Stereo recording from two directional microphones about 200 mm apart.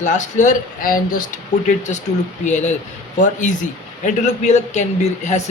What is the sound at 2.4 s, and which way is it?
A man's voice, 35° left (ahead or behind).